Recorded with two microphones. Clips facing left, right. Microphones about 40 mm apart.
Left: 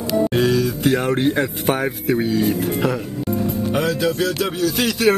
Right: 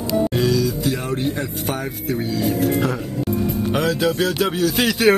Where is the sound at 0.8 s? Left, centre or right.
Left.